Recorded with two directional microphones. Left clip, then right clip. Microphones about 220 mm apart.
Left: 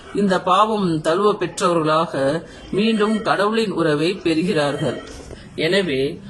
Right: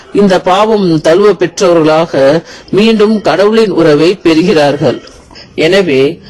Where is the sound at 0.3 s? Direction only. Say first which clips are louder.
Right 7 dB; 30° right (ahead or behind).